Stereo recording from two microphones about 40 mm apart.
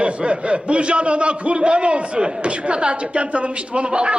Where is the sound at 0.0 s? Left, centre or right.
Right.